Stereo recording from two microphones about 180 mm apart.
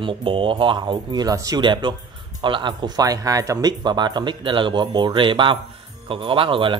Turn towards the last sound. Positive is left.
turn(degrees=-30)  # may be behind; listen again after turning